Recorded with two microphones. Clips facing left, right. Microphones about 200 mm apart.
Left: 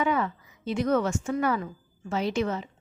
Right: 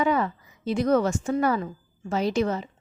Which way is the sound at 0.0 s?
35° right (ahead or behind).